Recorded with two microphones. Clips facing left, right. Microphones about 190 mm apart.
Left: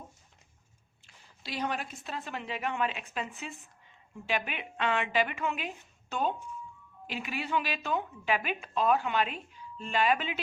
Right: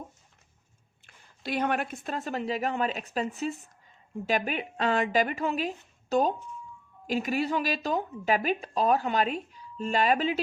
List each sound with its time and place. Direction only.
1.0 s speech: 55° right (ahead or behind); by 10.4 s 40° right (ahead or behind)